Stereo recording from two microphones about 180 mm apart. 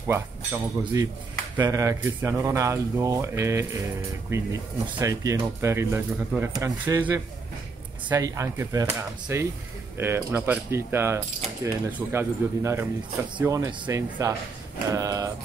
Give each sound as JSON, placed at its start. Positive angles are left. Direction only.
{"t": 0.0, "sound": "speech", "side_deg": -15}